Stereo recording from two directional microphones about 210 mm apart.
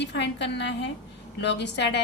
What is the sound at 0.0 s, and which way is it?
A woman's voice, 55° left (ahead or behind).